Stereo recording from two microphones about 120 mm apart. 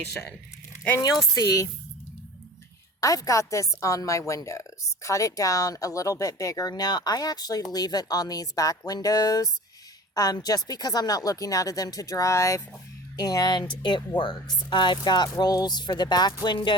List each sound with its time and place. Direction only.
1.4 s a woman's voice: 25° left (ahead or behind)
3.0 s a woman's voice: 30° left (ahead or behind)